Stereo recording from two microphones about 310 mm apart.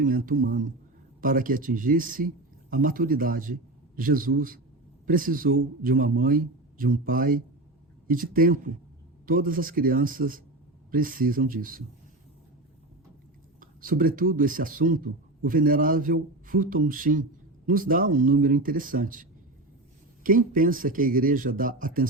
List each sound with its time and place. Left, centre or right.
0.0 s speech: right
13.6 s speech: right